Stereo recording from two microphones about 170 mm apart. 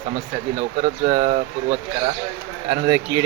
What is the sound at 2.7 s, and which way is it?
Speech, 35° right (ahead or behind).